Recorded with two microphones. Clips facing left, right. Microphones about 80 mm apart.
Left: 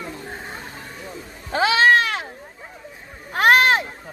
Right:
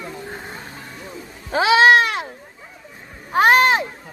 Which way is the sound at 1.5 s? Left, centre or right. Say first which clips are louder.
Right 3 dB; centre.